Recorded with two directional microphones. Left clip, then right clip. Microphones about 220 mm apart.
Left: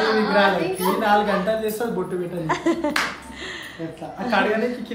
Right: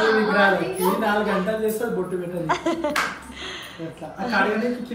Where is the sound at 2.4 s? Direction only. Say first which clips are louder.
Left 1 dB; 15° left (ahead or behind).